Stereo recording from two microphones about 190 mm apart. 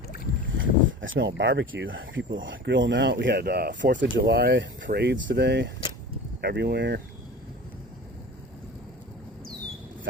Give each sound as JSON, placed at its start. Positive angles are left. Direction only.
{"t": 0.4, "sound": "speech", "side_deg": -90}